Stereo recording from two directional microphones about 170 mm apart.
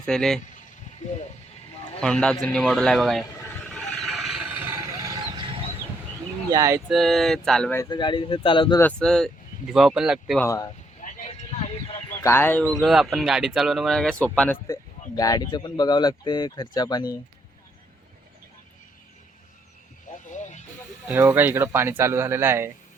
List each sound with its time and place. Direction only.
0.0 s speech: 5° left (ahead or behind)
2.0 s speech: 5° left (ahead or behind)
3.4 s a sound: 5° left (ahead or behind); by 5.2 s 20° right (ahead or behind)
6.5 s speech: 20° right (ahead or behind)
6.8 s speech: centre (ahead or behind)
7.8 s speech: 25° left (ahead or behind)
8.8 s speech: 5° left (ahead or behind)
10.4 s speech: 20° left (ahead or behind)
11.0 s vehicle: 45° left (ahead or behind)
12.2 s speech: 15° left (ahead or behind)
12.6 s speech: centre (ahead or behind)
14.7 s speech: 20° left (ahead or behind)
20.1 s vehicle: 50° left (ahead or behind)
21.1 s speech: 10° right (ahead or behind)